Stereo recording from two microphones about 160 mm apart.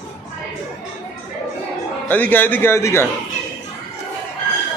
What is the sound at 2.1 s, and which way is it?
Speech, 10° left (ahead or behind).